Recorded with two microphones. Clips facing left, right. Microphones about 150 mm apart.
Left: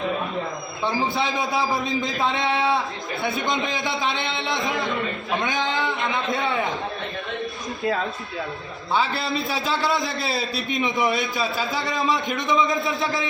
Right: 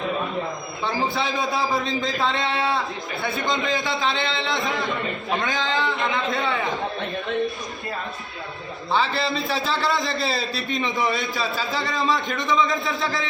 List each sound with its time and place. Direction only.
1.0 s a man's voice: 20° left (ahead or behind)
1.9 s a man's voice: centre (ahead or behind)
2.2 s a man's voice: 20° left (ahead or behind)
9.0 s a man's voice: 5° left (ahead or behind)
12.4 s a man's voice: 20° left (ahead or behind)